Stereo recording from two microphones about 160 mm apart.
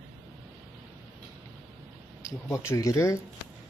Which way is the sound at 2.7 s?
15° left (ahead or behind).